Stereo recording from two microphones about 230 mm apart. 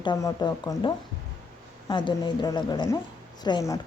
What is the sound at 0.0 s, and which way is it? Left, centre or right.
Speech, centre.